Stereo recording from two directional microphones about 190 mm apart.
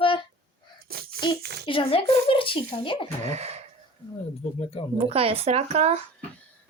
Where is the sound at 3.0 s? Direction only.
35° right (ahead or behind).